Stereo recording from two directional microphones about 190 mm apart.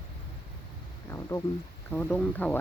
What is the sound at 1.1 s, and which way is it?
Speech, 15° left (ahead or behind).